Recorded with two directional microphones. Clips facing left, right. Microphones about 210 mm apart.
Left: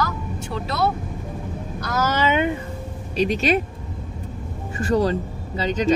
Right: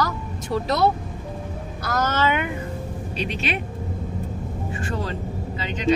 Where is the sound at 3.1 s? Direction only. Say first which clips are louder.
Left 8 dB; 45° left (ahead or behind).